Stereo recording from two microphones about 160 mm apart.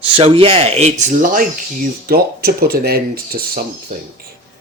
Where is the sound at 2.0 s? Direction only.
75° right (ahead or behind).